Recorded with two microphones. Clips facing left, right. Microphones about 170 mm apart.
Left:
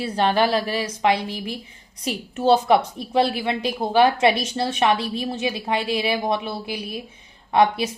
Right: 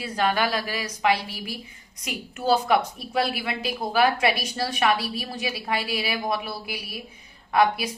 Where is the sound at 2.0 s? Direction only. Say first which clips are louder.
Left 5 dB; 30° left (ahead or behind).